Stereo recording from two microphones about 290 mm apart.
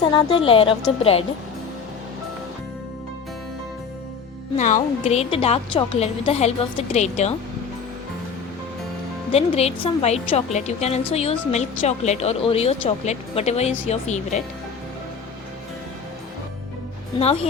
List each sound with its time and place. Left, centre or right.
0.0 s a woman's voice: centre
4.5 s a woman's voice: left
9.3 s a woman's voice: left
17.2 s a woman's voice: left